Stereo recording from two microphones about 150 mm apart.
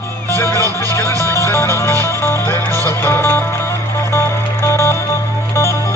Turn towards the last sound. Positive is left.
turn(degrees=20)  # may be behind; listen again after turning